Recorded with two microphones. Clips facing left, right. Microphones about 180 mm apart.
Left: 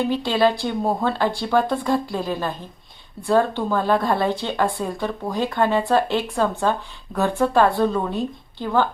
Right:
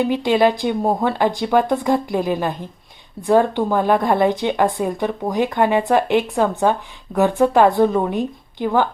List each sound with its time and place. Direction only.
0.1 s speech: 15° right (ahead or behind)